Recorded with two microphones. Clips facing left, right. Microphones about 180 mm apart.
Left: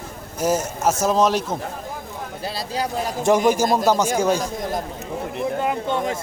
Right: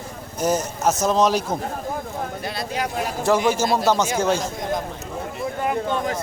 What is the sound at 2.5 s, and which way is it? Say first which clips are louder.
Speech: left 2 dB; 35° left (ahead or behind).